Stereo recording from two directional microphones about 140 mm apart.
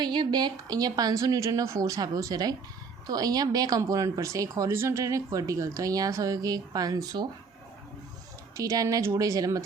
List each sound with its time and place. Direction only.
0.0 s speech: 30° right (ahead or behind)
8.5 s speech: 25° right (ahead or behind)